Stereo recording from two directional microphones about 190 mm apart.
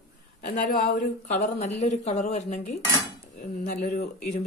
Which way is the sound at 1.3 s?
35° left (ahead or behind).